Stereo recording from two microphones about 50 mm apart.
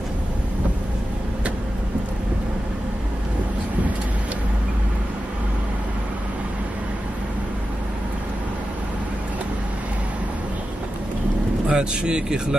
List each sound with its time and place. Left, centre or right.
11.6 s speech: centre